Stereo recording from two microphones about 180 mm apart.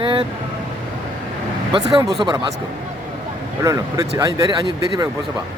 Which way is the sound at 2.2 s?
20° right (ahead or behind).